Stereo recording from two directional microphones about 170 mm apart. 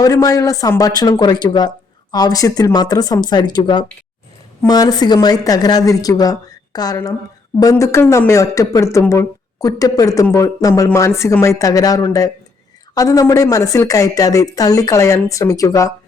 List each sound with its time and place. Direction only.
0.0 s a woman's voice: 20° left (ahead or behind)